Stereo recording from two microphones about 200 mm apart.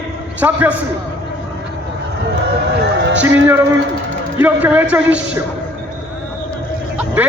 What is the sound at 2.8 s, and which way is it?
Music, 65° right (ahead or behind).